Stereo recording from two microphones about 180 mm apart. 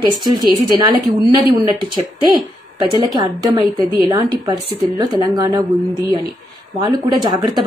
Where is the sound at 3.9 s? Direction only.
20° right (ahead or behind).